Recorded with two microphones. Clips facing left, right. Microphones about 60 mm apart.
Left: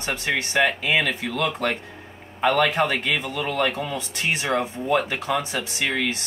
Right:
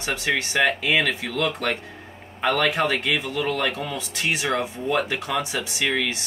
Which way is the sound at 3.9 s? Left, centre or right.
Left.